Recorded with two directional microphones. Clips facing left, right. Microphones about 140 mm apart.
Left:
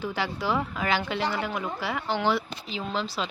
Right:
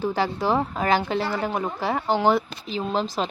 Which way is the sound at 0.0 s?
40° right (ahead or behind).